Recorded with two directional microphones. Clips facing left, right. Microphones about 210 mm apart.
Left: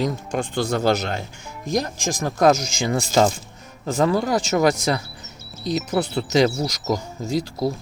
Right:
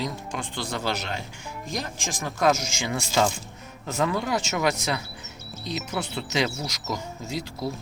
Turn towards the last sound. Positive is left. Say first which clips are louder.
# left 8 dB
turn(degrees=40)  # may be behind; listen again after turning